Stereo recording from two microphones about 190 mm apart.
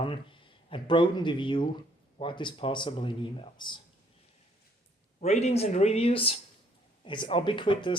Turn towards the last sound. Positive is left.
turn(degrees=25)  # may be behind; listen again after turning